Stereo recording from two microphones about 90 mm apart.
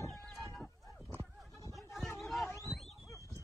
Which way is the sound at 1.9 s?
Centre (ahead or behind).